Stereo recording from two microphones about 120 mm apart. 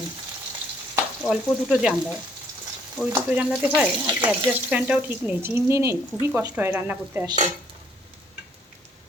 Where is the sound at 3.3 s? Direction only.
15° right (ahead or behind).